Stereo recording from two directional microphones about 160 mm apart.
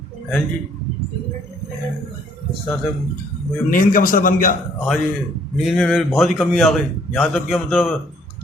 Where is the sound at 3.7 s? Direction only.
60° left (ahead or behind).